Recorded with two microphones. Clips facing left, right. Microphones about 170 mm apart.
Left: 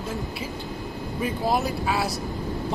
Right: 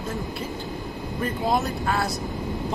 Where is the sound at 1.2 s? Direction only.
5° left (ahead or behind).